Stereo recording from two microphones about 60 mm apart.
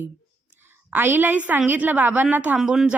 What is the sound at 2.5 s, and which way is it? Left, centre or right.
Speech, centre.